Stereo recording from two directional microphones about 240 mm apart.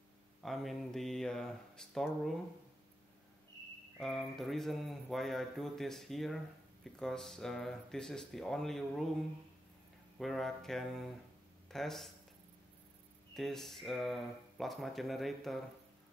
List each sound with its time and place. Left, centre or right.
0.4 s speech: centre
4.0 s speech: centre
10.1 s speech: centre
13.3 s speech: centre